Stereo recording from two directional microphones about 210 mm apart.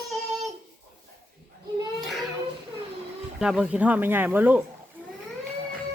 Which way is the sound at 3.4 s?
5° right (ahead or behind).